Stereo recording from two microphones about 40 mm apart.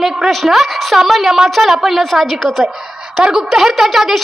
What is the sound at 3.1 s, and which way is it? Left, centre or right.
A woman's voice, centre.